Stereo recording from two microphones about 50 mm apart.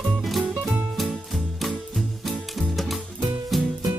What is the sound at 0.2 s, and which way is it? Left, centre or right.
Music, centre.